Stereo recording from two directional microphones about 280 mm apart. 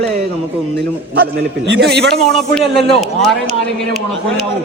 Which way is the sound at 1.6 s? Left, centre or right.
Right.